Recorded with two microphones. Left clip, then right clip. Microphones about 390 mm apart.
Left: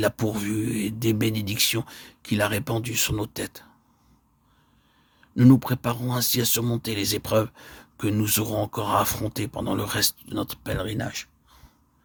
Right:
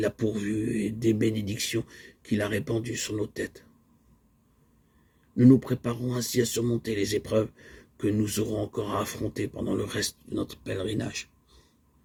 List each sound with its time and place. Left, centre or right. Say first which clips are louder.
0.3 s speech: left 2 dB; left
5.3 s speech: left 1 dB; left